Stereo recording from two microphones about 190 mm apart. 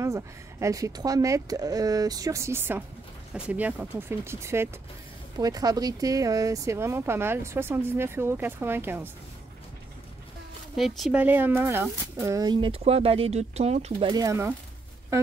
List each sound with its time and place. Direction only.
0.0 s speech: 15° right (ahead or behind)
10.8 s speech: centre (ahead or behind)